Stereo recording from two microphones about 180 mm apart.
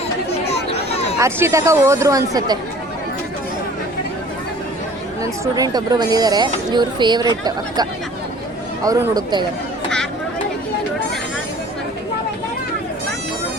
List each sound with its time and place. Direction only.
0.3 s a sound: 35° left (ahead or behind)
1.2 s speech: 15° right (ahead or behind)
5.2 s speech: 20° right (ahead or behind)